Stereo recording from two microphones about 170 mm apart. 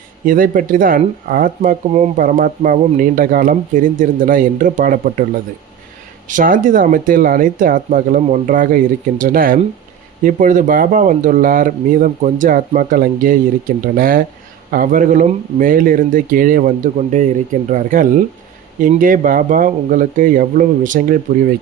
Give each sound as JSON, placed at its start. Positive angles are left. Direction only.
{"t": 0.3, "sound": "speech", "side_deg": -55}
{"t": 6.2, "sound": "speech", "side_deg": -50}